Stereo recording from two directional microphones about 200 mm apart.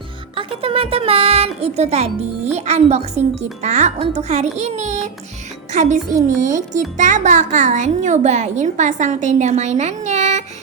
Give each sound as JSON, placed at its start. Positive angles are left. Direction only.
{"t": 0.3, "sound": "a child's voice", "side_deg": -30}